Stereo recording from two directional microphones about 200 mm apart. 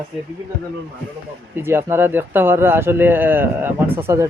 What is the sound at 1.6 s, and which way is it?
A man's voice, 10° right (ahead or behind).